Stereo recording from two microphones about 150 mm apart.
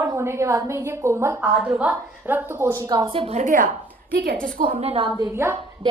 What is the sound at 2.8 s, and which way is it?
A woman's voice, 30° right (ahead or behind).